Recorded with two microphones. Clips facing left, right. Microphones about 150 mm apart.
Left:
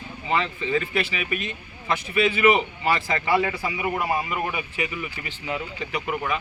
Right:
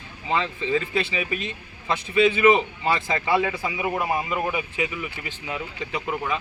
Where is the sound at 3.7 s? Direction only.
20° right (ahead or behind).